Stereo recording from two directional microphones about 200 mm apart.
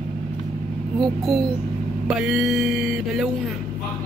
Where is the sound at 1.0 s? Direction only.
Centre (ahead or behind).